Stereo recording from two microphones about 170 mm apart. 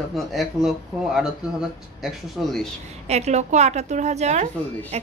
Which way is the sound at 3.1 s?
40° right (ahead or behind).